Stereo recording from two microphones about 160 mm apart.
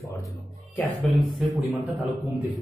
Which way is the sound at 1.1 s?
Centre (ahead or behind).